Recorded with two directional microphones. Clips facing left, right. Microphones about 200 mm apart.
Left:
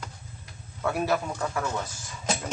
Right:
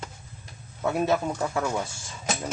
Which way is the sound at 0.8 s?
20° right (ahead or behind).